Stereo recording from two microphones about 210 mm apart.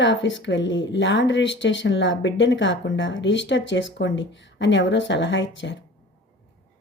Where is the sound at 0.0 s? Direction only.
60° left (ahead or behind).